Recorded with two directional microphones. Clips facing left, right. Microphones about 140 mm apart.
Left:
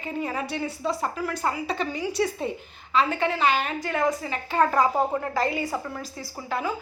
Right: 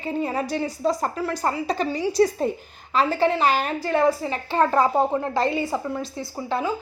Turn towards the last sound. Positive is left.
turn(degrees=-25)  # may be behind; listen again after turning